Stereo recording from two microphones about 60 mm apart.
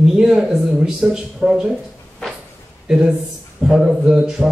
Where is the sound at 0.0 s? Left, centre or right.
Centre.